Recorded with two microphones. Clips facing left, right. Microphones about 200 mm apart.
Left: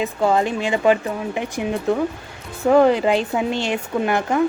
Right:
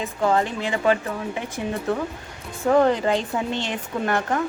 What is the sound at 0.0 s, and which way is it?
Speech, 15° left (ahead or behind).